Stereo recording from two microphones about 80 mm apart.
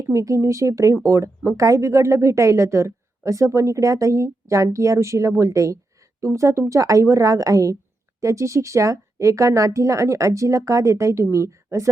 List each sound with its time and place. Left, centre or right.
0.0 s speech: right